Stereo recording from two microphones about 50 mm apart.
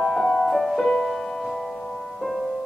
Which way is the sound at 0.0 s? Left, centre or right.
Centre.